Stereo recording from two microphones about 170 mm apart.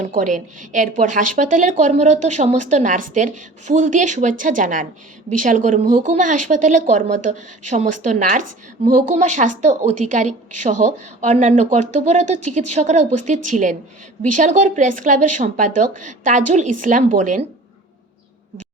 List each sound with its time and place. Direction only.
0.0 s a woman's voice: 50° right (ahead or behind)